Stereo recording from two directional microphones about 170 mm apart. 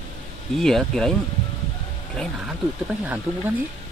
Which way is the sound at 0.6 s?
Centre (ahead or behind).